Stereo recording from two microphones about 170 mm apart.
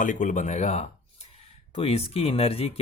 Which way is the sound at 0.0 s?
50° left (ahead or behind).